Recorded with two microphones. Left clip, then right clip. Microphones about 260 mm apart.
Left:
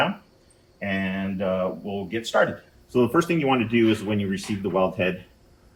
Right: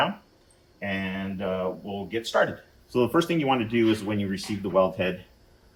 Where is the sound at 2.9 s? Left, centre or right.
Right.